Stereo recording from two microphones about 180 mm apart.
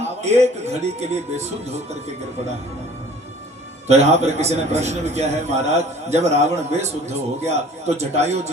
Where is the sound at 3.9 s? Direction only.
35° right (ahead or behind).